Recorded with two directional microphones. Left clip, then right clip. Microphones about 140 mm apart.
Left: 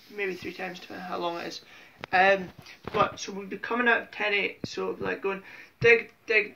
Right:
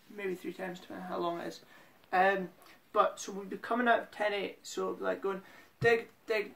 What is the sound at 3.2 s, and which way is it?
Speech, 35° right (ahead or behind).